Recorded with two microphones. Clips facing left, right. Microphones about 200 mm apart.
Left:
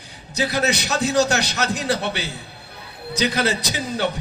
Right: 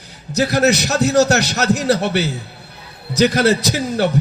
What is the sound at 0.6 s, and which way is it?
A man's voice, 40° right (ahead or behind).